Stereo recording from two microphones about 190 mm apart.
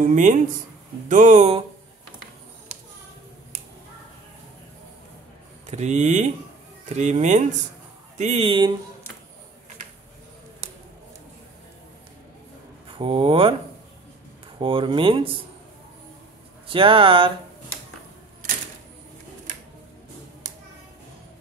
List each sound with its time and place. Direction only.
0.0 s speech: 40° right (ahead or behind)
5.7 s speech: 35° right (ahead or behind)
13.0 s speech: 30° right (ahead or behind)
14.6 s speech: 25° right (ahead or behind)
16.6 s speech: 25° right (ahead or behind)